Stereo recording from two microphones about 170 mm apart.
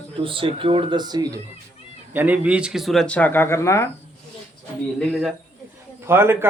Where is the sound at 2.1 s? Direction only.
10° right (ahead or behind); by 3.8 s 15° left (ahead or behind).